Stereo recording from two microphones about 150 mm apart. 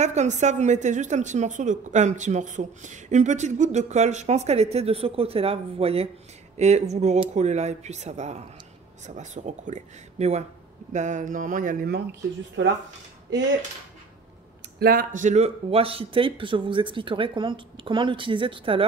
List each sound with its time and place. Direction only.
0.0 s a woman's voice: 50° right (ahead or behind); by 12.0 s 80° right
14.8 s speech: 75° right (ahead or behind); by 18.9 s 35° right (ahead or behind)